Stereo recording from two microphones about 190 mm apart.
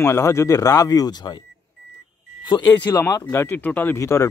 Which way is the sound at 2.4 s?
20° left (ahead or behind).